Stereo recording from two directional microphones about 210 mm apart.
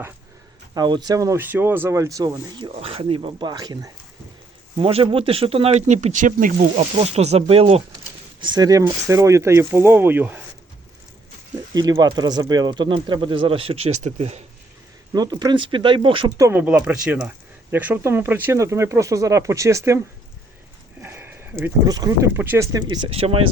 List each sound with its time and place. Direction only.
0.7 s speech: 20° right (ahead or behind)
11.7 s speech: 20° right (ahead or behind)
15.1 s speech: 20° right (ahead or behind)
16.5 s speech: 10° right (ahead or behind)
21.0 s speech: 10° right (ahead or behind); by 23.5 s 25° right (ahead or behind)